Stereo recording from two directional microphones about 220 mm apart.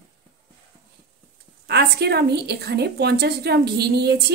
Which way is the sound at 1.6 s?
45° right (ahead or behind).